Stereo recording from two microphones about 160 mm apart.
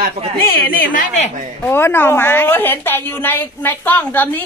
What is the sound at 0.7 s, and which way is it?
Speech, 60° left (ahead or behind).